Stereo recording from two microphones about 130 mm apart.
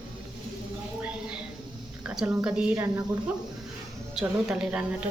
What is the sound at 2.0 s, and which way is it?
Speech, 10° right (ahead or behind).